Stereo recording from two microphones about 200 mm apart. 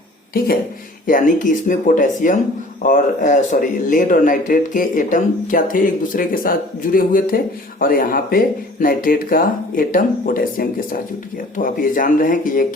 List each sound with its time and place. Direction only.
0.3 s speech: 45° left (ahead or behind)